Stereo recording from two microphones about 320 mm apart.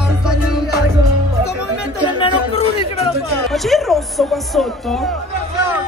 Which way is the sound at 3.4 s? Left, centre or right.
Centre.